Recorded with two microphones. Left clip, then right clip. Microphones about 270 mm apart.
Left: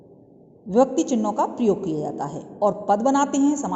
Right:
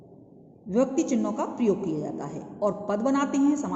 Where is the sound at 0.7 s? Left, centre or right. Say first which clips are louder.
Left 6 dB; centre.